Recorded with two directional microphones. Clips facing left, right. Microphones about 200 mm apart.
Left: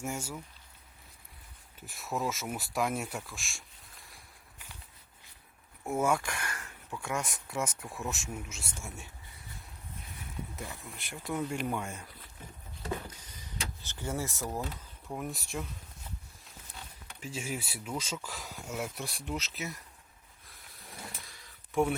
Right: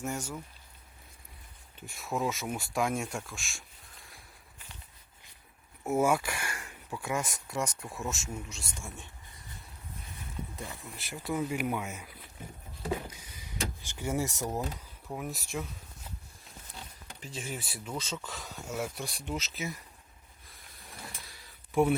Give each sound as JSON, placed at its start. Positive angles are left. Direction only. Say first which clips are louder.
{"t": 0.0, "sound": "speech", "louder": "right 1 dB", "side_deg": 10}
{"t": 1.9, "sound": "speech", "louder": "right 2 dB", "side_deg": 0}
{"t": 5.8, "sound": "speech", "louder": "right 3 dB", "side_deg": -5}
{"t": 10.8, "sound": "speech", "louder": "right 2 dB", "side_deg": 0}
{"t": 12.8, "sound": "a sound", "louder": "right 3 dB", "side_deg": -10}
{"t": 13.8, "sound": "speech", "louder": "right 3 dB", "side_deg": -10}
{"t": 15.0, "sound": "speech", "louder": "even", "side_deg": 0}
{"t": 17.2, "sound": "speech", "louder": "left 2 dB", "side_deg": 5}